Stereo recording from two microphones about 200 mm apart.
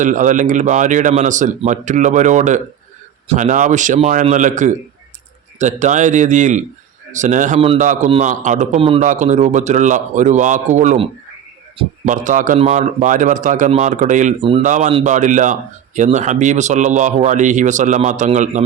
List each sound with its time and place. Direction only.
0.0 s a man's voice: 40° right (ahead or behind)
14.4 s a man's voice: 25° right (ahead or behind)